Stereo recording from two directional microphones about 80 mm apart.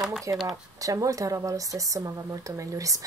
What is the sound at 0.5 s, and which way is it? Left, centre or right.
Speech, right.